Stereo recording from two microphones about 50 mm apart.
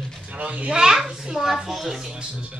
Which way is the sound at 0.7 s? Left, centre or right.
Centre.